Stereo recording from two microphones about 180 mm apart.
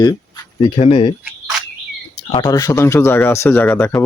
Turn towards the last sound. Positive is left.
turn(degrees=15)  # may be behind; listen again after turning